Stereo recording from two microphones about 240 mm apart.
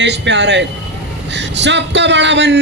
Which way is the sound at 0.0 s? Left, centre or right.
Right.